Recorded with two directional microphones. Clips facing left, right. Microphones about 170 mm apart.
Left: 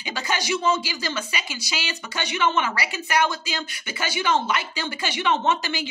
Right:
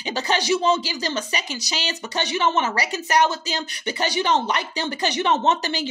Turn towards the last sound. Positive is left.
turn(degrees=-35)  # may be behind; listen again after turning